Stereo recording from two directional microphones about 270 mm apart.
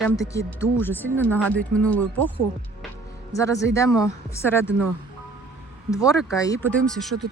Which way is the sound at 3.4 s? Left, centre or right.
Centre.